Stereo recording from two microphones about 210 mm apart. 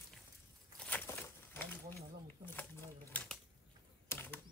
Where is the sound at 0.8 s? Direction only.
10° left (ahead or behind).